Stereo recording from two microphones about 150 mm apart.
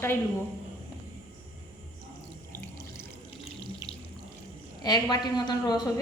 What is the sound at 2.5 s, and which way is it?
Water tap, 15° left (ahead or behind).